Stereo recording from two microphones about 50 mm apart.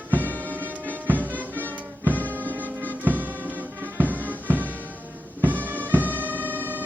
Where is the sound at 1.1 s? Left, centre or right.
Right.